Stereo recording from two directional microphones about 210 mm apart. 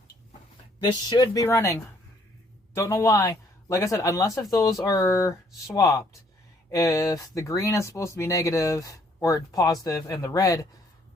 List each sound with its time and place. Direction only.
0.8 s speech: 20° left (ahead or behind)